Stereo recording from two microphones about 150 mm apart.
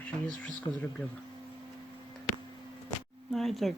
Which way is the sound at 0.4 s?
5° left (ahead or behind).